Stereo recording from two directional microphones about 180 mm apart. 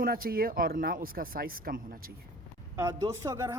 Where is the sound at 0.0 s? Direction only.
55° right (ahead or behind).